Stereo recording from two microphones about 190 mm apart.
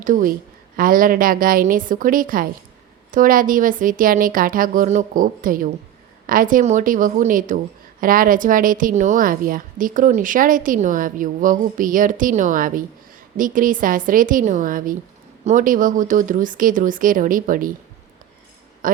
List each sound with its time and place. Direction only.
0.0 s a woman's voice: 45° right (ahead or behind)